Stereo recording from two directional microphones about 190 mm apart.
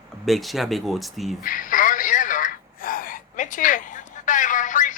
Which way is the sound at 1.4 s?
45° left (ahead or behind).